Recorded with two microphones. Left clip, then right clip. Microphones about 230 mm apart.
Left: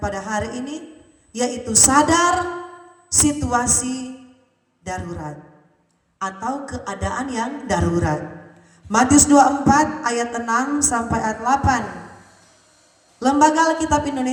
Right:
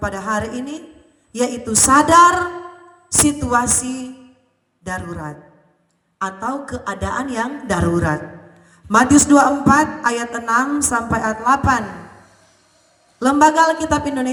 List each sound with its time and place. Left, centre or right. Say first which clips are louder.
0.0 s a man's voice: right 3 dB; centre
13.1 s a man's voice: right 3 dB; centre